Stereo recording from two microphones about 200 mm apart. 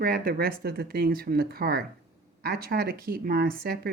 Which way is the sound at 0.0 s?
50° right (ahead or behind).